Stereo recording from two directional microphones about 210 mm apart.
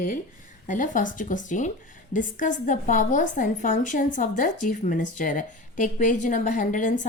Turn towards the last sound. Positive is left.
turn(degrees=35)  # may be behind; listen again after turning